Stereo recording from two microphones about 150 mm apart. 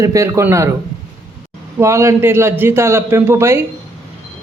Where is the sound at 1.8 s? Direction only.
20° right (ahead or behind).